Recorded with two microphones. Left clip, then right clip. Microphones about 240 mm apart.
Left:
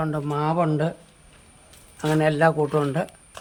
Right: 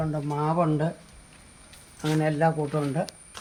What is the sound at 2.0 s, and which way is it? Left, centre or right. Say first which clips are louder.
Speech: left 5 dB; centre.